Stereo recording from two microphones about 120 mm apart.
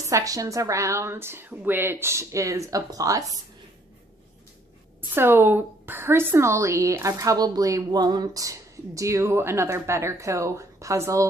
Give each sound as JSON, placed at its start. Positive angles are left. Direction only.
{"t": 0.0, "sound": "a woman's voice", "side_deg": -25}
{"t": 5.1, "sound": "a woman's voice", "side_deg": -20}